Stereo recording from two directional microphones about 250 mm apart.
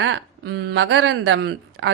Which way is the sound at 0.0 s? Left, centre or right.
Right.